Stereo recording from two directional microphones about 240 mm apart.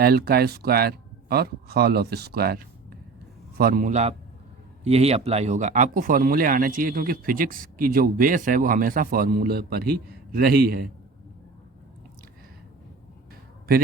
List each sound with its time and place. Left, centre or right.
0.0 s speech: right